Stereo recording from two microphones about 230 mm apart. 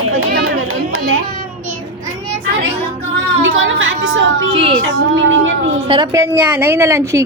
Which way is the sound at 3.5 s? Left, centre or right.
Right.